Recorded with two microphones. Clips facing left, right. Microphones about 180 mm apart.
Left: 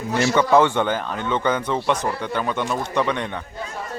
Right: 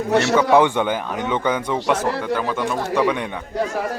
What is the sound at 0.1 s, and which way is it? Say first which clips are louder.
Speech: right 3 dB; 70° right (ahead or behind).